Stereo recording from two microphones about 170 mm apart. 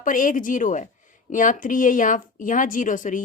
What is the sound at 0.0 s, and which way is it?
Speech, 50° left (ahead or behind).